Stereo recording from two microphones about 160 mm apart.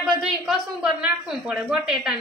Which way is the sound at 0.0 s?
5° right (ahead or behind).